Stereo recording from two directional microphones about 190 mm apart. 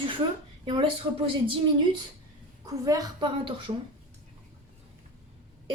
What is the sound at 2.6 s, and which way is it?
A woman's voice, 20° right (ahead or behind).